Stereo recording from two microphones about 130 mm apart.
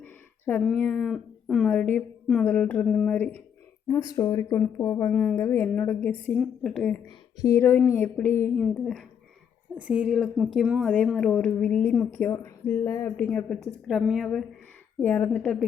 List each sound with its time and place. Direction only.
0.0 s a sound: 15° left (ahead or behind)
0.7 s speech: 10° left (ahead or behind)
1.1 s speech: centre (ahead or behind)
1.6 s a woman's voice: 10° left (ahead or behind)
5.1 s speech: 10° left (ahead or behind)
6.4 s a woman's voice: centre (ahead or behind)
7.0 s speech: 25° left (ahead or behind)
8.6 s a woman's voice: centre (ahead or behind)
9.8 s speech: 10° right (ahead or behind)
10.8 s speech: 10° left (ahead or behind)
13.8 s a woman's voice: 5° right (ahead or behind)
15.0 s speech: 15° left (ahead or behind)